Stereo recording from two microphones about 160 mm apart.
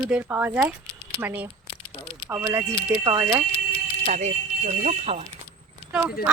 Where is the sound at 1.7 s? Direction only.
35° left (ahead or behind).